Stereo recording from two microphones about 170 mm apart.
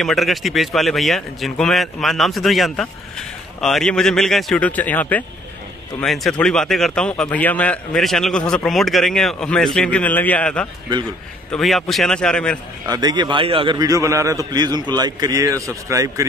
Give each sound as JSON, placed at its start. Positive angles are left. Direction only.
{"t": 0.0, "sound": "a man's voice", "side_deg": 0}
{"t": 12.8, "sound": "a man's voice", "side_deg": -20}